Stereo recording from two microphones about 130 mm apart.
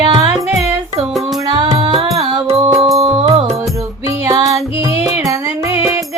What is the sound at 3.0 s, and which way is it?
Music, 50° right (ahead or behind).